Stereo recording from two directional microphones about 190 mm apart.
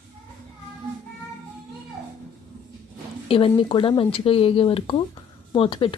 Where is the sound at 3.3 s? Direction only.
30° left (ahead or behind).